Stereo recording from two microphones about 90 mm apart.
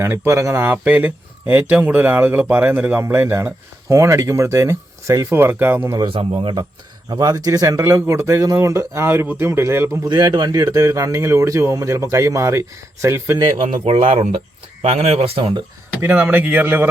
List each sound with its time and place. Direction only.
0.0 s a man's voice: 30° right (ahead or behind)
5.3 s speech: 25° right (ahead or behind)
6.1 s a man's voice: 70° right (ahead or behind)
7.1 s a man's voice: 45° right (ahead or behind)
10.1 s a man's voice: 55° right (ahead or behind); by 13.4 s 30° right (ahead or behind)
13.4 s speech: 90° right
16.0 s speech: 20° right (ahead or behind)